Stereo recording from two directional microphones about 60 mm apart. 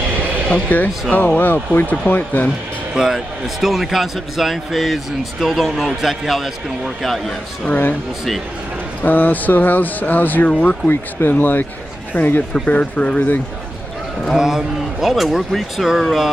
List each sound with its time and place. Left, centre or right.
0.7 s speech: left
2.9 s a man's voice: centre
9.0 s speech: left
10.9 s speech: left
14.3 s a man's voice: centre